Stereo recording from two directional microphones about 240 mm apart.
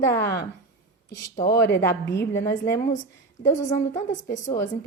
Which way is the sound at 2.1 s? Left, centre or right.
Centre.